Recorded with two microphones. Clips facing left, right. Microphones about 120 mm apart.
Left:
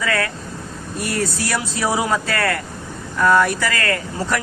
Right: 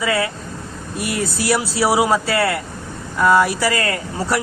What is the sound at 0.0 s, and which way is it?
Speech, 15° right (ahead or behind).